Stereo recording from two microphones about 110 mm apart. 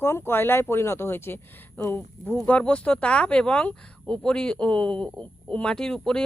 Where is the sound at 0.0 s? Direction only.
20° left (ahead or behind).